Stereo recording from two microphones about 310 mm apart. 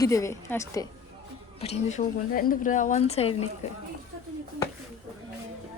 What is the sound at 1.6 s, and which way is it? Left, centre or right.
Speech, left.